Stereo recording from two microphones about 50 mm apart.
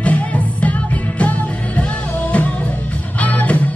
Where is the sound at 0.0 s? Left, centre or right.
Left.